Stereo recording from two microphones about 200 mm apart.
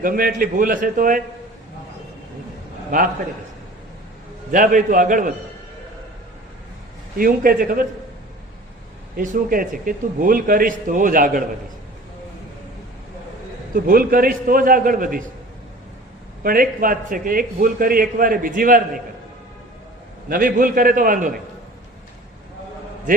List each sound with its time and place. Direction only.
0.0 s a man's voice: 45° right (ahead or behind)
4.5 s a man's voice: 40° right (ahead or behind)
7.2 s a man's voice: 45° right (ahead or behind)
9.1 s a man's voice: 45° right (ahead or behind)
13.7 s a man's voice: 45° right (ahead or behind)
16.4 s a man's voice: 45° right (ahead or behind)
20.3 s a man's voice: 45° right (ahead or behind)